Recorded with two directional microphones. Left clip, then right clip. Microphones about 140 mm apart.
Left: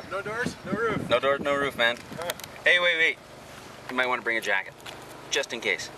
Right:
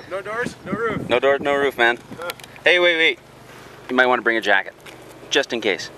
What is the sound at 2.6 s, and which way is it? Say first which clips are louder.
Speech: right 6 dB; 30° right (ahead or behind).